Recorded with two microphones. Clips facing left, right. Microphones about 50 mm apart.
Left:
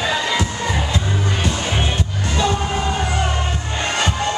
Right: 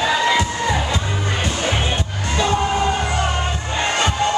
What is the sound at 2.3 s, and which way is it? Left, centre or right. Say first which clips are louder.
Music: right 2 dB; centre.